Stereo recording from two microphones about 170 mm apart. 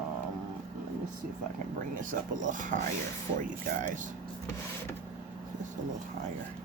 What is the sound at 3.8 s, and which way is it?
Speech, 50° right (ahead or behind).